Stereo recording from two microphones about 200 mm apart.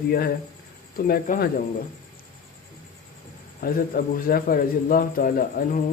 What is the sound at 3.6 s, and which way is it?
A man's voice, 50° left (ahead or behind).